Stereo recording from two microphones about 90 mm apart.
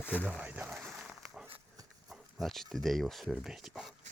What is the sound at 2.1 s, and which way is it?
Speech, centre (ahead or behind).